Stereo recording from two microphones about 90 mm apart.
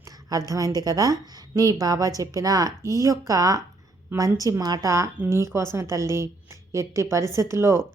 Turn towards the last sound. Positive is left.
turn(degrees=-30)  # may be behind; listen again after turning